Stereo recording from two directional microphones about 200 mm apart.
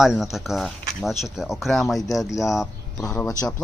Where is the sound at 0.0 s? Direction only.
Centre (ahead or behind).